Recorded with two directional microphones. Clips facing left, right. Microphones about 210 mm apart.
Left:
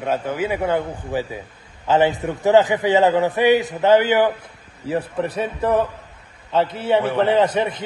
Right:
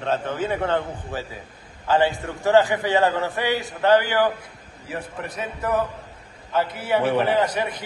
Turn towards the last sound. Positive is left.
turn(degrees=25)  # may be behind; listen again after turning